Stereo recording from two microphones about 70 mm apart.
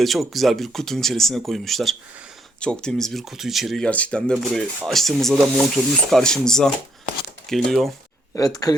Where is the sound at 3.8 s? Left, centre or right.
Centre.